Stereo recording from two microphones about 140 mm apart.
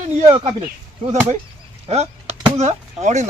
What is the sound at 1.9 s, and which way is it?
Chop, 50° right (ahead or behind).